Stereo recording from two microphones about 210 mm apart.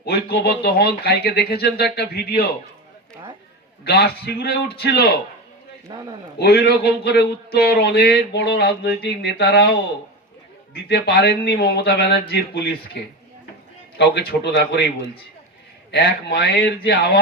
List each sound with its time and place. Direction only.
0.0 s speech: 50° left (ahead or behind)
3.8 s speech: 50° left (ahead or behind)
5.9 s a man's voice: 15° right (ahead or behind)
6.4 s speech: 50° left (ahead or behind)
10.8 s speech: 50° left (ahead or behind)
15.9 s speech: 50° left (ahead or behind)